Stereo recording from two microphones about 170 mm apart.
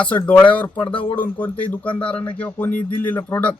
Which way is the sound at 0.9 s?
30° left (ahead or behind).